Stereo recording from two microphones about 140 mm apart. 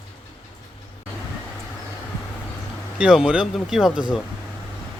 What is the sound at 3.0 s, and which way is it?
Speech, 5° right (ahead or behind).